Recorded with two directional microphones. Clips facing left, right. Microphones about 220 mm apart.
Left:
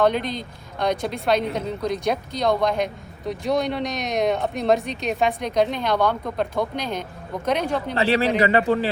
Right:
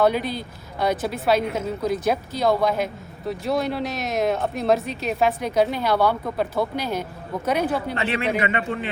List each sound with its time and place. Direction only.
0.0 s speech: 5° right (ahead or behind)
7.9 s speech: 35° left (ahead or behind)